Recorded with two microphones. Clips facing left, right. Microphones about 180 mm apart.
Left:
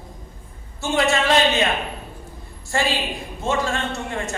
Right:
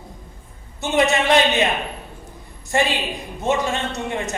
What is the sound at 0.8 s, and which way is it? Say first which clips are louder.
Speech: right 2 dB; 20° right (ahead or behind).